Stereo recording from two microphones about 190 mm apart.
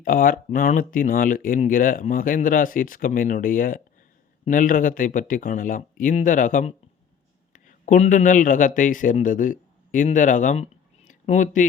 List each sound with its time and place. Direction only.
0.0 s a man's voice: 50° left (ahead or behind)